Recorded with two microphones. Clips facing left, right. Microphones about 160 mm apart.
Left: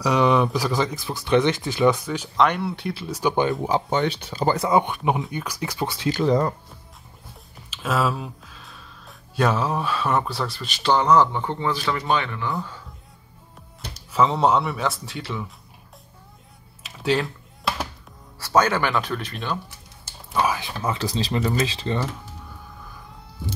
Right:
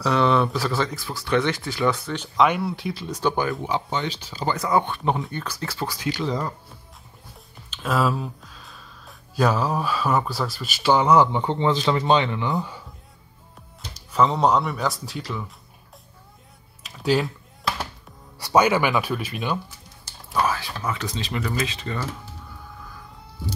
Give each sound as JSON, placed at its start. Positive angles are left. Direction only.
{"t": 0.0, "sound": "speech", "side_deg": 15}
{"t": 2.3, "sound": "speech", "side_deg": -5}
{"t": 3.6, "sound": "speech", "side_deg": 40}
{"t": 4.0, "sound": "speech", "side_deg": 60}
{"t": 4.6, "sound": "speech", "side_deg": 15}
{"t": 7.7, "sound": "speech", "side_deg": 0}
{"t": 14.1, "sound": "speech", "side_deg": 0}
{"t": 16.8, "sound": "typing", "side_deg": 0}
{"t": 18.4, "sound": "speech", "side_deg": -10}
{"t": 20.3, "sound": "speech", "side_deg": 15}